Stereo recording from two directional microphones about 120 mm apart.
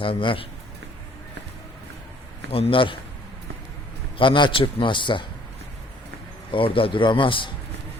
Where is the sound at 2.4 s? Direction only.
55° left (ahead or behind).